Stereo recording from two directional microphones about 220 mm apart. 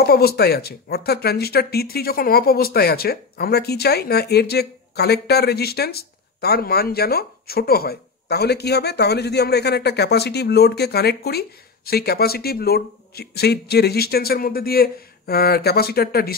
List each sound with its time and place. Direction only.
0.0 s speech: 45° left (ahead or behind)